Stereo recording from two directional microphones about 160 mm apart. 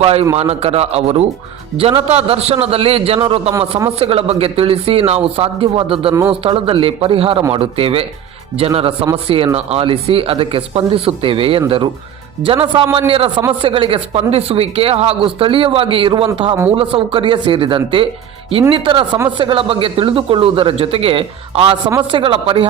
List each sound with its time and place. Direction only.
0.0 s speech: 40° right (ahead or behind)
12.7 s speech: 30° right (ahead or behind)